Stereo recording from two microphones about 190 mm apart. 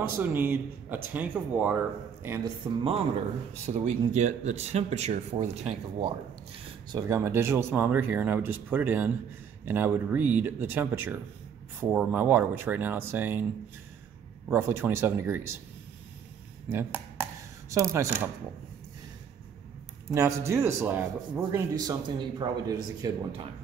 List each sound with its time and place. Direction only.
0.2 s speech: 10° right (ahead or behind)
2.4 s speech: 30° right (ahead or behind)
6.9 s speech: 20° right (ahead or behind)
14.5 s speech: 15° right (ahead or behind)
16.6 s a sound: 10° right (ahead or behind)
17.7 s speech: 15° right (ahead or behind)
20.2 s speech: 15° right (ahead or behind)